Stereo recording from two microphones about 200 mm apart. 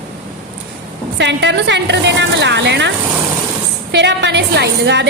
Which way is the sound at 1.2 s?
60° right (ahead or behind).